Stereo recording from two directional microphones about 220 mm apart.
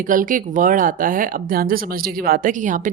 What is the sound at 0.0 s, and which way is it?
Speech, 40° right (ahead or behind).